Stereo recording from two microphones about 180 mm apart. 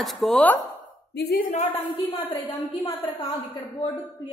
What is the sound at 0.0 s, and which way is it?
Speech, centre (ahead or behind).